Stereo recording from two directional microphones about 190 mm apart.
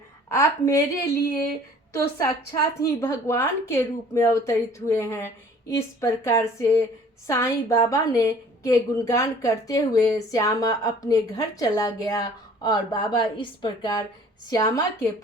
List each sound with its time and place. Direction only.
0.3 s speech: 15° left (ahead or behind)
1.9 s a woman's voice: 15° left (ahead or behind)